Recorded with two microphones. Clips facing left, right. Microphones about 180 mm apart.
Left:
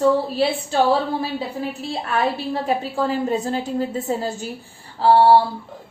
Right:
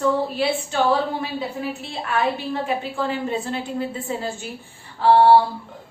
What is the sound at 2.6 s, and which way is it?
A woman's voice, 40° left (ahead or behind).